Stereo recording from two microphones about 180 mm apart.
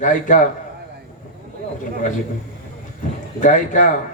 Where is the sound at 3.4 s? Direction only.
45° left (ahead or behind).